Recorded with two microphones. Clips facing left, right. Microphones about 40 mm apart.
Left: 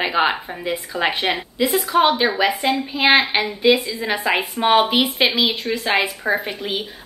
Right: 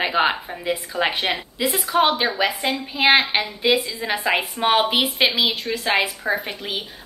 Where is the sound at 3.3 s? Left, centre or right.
Centre.